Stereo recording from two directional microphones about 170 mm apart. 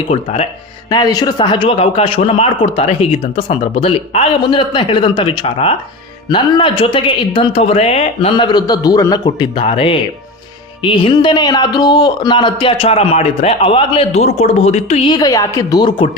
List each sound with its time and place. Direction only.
0.1 s a man's voice: 40° left (ahead or behind)
0.9 s a man's voice: 20° left (ahead or behind); by 15.1 s 40° left (ahead or behind)
15.1 s a woman's voice: 20° left (ahead or behind)